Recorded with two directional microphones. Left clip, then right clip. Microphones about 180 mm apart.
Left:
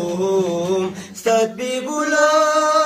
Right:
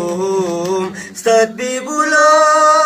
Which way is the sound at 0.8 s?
15° right (ahead or behind).